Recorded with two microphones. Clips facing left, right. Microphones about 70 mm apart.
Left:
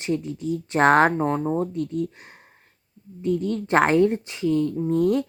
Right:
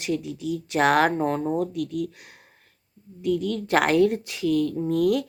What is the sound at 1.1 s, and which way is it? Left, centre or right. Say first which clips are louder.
Speech: left 1 dB; centre.